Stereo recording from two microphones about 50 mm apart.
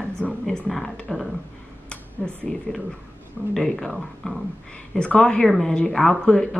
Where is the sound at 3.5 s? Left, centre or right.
Centre.